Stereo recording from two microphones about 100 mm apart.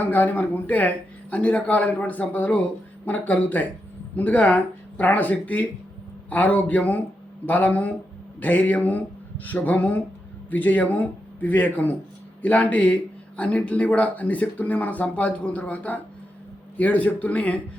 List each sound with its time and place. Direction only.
0.0 s speech: 15° left (ahead or behind)